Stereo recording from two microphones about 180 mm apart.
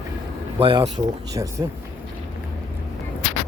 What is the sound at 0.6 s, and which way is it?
Speech, 30° right (ahead or behind).